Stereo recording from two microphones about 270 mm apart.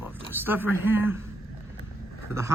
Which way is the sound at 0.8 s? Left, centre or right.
Centre.